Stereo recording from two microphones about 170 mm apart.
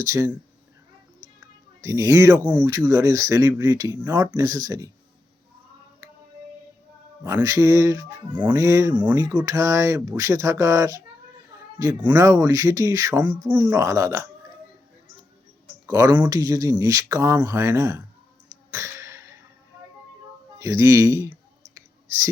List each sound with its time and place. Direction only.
0.0 s speech: 15° right (ahead or behind)
1.4 s a sound: 20° right (ahead or behind)
2.6 s speech: 20° right (ahead or behind)
7.3 s speech: 15° right (ahead or behind)
8.4 s speech: 10° right (ahead or behind)
8.6 s speech: 20° right (ahead or behind)
15.9 s speech: 20° right (ahead or behind)
18.7 s a sound: 15° right (ahead or behind)
20.6 s speech: 20° right (ahead or behind)